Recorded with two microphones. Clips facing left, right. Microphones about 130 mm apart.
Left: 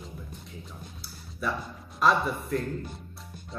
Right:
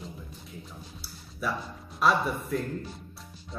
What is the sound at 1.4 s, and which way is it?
Speech, centre (ahead or behind).